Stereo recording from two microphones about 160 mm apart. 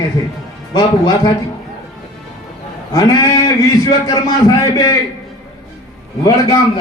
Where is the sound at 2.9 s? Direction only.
25° left (ahead or behind).